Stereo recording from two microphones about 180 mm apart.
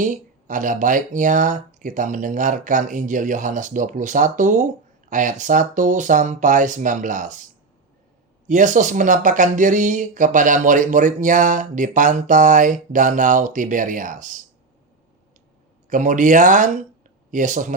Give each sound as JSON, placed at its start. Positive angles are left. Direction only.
{"t": 0.0, "sound": "speech", "side_deg": -45}
{"t": 15.9, "sound": "speech", "side_deg": -45}